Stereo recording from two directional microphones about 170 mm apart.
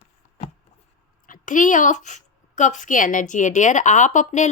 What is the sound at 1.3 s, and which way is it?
Speech, 50° left (ahead or behind).